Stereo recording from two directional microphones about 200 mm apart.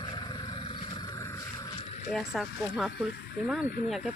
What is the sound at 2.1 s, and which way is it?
Speech, centre (ahead or behind).